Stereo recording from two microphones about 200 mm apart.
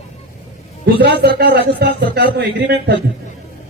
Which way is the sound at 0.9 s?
55° right (ahead or behind).